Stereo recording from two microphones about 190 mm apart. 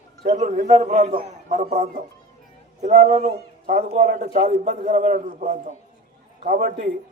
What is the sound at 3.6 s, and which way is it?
A man's voice, 50° right (ahead or behind).